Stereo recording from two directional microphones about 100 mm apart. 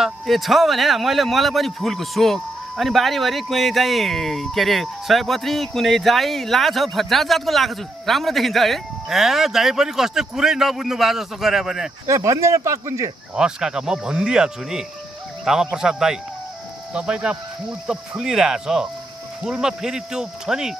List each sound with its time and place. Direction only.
0.0 s a man's voice: centre (ahead or behind)
12.1 s speech: 30° right (ahead or behind)
13.4 s a man's voice: 5° right (ahead or behind)